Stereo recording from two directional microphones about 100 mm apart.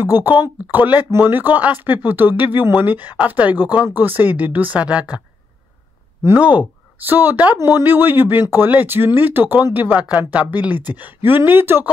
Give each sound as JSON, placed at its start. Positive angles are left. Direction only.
{"t": 0.0, "sound": "speech", "side_deg": -20}
{"t": 6.2, "sound": "speech", "side_deg": -15}